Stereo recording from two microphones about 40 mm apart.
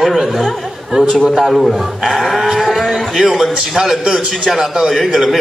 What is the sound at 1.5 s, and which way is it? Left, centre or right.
A woman's voice, centre.